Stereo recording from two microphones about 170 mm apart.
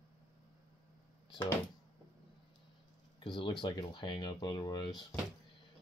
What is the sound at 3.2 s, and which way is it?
Speech, 30° left (ahead or behind).